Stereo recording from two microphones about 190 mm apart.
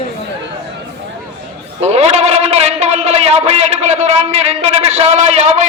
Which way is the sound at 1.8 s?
35° right (ahead or behind).